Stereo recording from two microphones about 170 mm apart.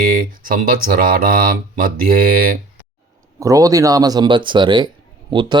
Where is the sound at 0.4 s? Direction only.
55° right (ahead or behind).